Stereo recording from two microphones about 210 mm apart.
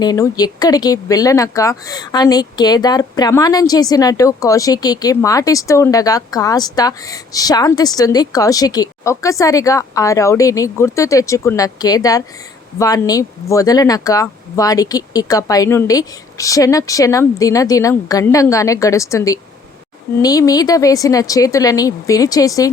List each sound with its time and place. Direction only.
0.0 s speech: 20° left (ahead or behind)